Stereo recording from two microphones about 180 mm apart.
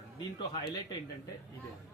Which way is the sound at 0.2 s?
25° left (ahead or behind).